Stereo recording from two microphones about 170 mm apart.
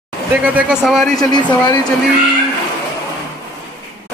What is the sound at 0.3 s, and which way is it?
Speech, 5° right (ahead or behind).